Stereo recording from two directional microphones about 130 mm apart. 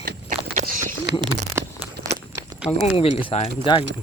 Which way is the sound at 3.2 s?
55° left (ahead or behind).